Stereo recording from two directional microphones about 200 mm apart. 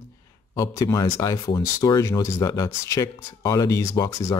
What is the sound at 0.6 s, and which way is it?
Speech, 15° left (ahead or behind).